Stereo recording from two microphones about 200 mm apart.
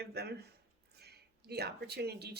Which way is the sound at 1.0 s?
55° right (ahead or behind).